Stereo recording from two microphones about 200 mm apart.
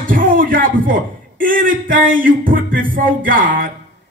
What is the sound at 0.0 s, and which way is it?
A man's voice, 45° right (ahead or behind).